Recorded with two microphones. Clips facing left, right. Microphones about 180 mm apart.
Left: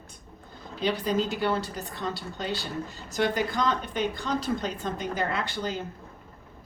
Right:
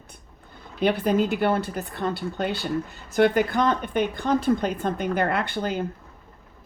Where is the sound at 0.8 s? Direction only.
55° right (ahead or behind).